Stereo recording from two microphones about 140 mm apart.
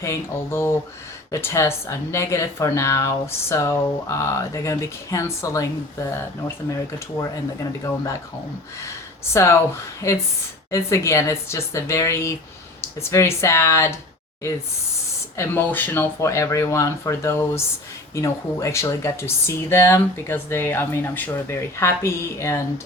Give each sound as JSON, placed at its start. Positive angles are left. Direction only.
{"t": 0.0, "sound": "speech", "side_deg": 20}
{"t": 9.3, "sound": "speech", "side_deg": 20}
{"t": 15.4, "sound": "speech", "side_deg": 15}